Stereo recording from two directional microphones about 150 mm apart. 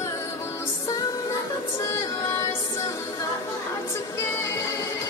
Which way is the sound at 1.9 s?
20° left (ahead or behind).